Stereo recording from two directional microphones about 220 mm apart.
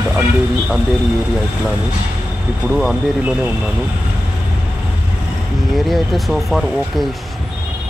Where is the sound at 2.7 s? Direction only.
Centre (ahead or behind).